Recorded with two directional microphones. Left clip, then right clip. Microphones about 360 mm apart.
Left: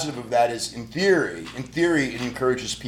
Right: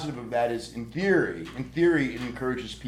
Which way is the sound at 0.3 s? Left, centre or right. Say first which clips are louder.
Left 6 dB; left.